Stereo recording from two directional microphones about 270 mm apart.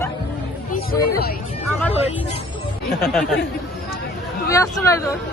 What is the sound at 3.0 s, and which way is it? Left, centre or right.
Speech, centre.